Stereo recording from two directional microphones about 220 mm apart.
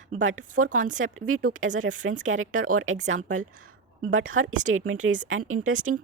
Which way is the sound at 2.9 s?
35° right (ahead or behind).